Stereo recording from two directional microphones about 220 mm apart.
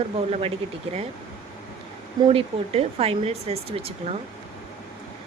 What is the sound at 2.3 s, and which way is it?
Speech, 25° right (ahead or behind).